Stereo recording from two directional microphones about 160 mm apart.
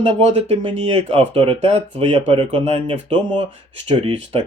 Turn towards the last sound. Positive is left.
turn(degrees=-35)  # may be behind; listen again after turning